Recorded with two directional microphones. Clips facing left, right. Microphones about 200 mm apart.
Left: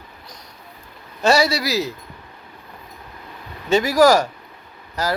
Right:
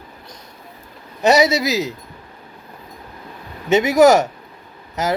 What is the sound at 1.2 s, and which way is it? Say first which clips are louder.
Speech: right 3 dB; 20° right (ahead or behind).